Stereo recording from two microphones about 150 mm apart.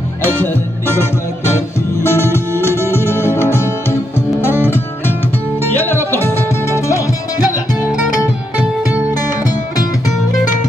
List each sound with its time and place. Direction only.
2.0 s music: 15° left (ahead or behind)
5.7 s music: 15° left (ahead or behind)